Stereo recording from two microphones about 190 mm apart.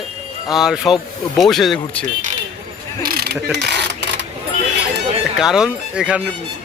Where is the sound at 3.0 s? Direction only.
55° right (ahead or behind).